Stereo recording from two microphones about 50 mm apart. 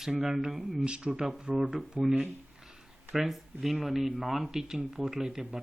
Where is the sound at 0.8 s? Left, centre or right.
Centre.